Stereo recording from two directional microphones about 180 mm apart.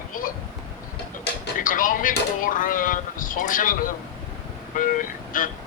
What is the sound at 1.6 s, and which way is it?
Speech, 50° left (ahead or behind).